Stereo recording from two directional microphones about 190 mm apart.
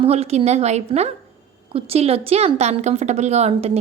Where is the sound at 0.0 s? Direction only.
30° right (ahead or behind).